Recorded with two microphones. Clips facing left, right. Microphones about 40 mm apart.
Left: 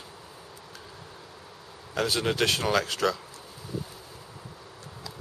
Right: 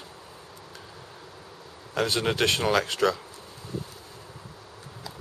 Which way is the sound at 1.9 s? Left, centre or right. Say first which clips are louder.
Right 1 dB; centre.